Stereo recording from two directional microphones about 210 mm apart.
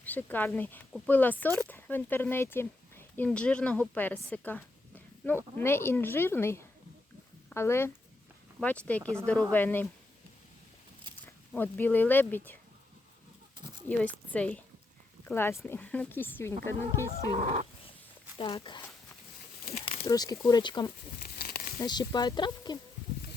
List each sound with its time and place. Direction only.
0.0 s speech: 10° left (ahead or behind)
11.1 s a sound: 20° right (ahead or behind)
11.5 s speech: 10° left (ahead or behind)
13.8 s a woman's voice: 5° left (ahead or behind)
17.1 s a sound: 35° right (ahead or behind)
18.3 s speech: 25° left (ahead or behind)
19.7 s a sound: 30° left (ahead or behind)
20.1 s speech: 15° left (ahead or behind)
21.2 s crumpling: 45° left (ahead or behind)
21.8 s speech: 20° left (ahead or behind)